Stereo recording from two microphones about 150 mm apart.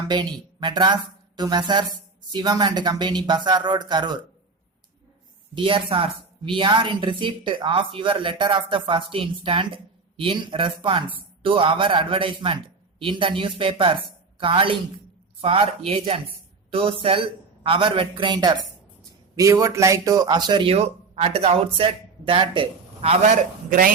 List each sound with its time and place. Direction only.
0.1 s speech: 30° right (ahead or behind)
5.5 s a woman's voice: 35° right (ahead or behind)
23.6 s speech: 70° right (ahead or behind)